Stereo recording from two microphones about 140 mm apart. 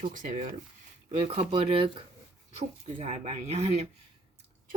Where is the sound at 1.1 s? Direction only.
45° right (ahead or behind).